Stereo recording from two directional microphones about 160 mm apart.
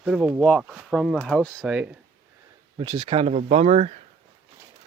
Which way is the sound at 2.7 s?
30° right (ahead or behind).